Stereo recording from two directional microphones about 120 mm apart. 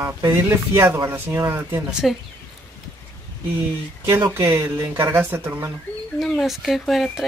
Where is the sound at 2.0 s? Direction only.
Centre (ahead or behind).